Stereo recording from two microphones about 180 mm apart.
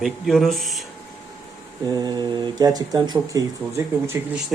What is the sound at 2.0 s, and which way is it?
Speech, 25° right (ahead or behind).